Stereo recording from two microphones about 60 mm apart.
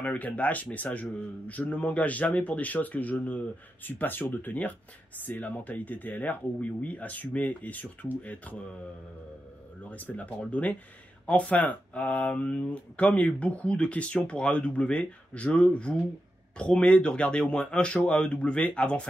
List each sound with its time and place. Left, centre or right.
0.0 s speech: left
9.8 s speech: left